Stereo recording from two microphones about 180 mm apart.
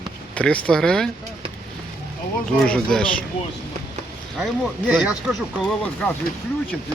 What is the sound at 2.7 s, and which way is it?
Speech, 5° left (ahead or behind).